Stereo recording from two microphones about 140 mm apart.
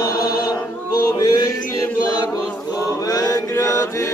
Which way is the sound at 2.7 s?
25° left (ahead or behind).